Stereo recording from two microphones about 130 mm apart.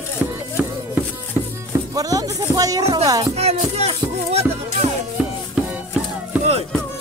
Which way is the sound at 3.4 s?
55° right (ahead or behind).